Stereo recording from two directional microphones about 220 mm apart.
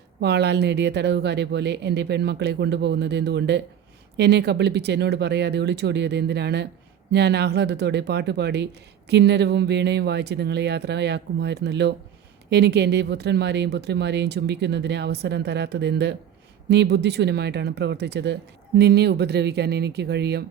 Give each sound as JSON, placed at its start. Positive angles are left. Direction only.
{"t": 0.2, "sound": "speech", "side_deg": -50}